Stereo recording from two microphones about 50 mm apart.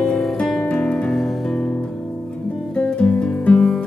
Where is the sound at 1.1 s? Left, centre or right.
Centre.